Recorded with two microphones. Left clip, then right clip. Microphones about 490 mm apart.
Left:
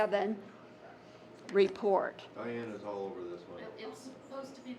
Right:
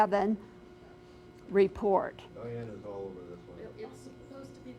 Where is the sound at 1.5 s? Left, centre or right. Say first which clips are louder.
Right 2 dB; right.